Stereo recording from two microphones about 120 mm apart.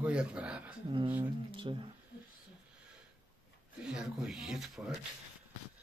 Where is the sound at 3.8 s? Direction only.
5° right (ahead or behind).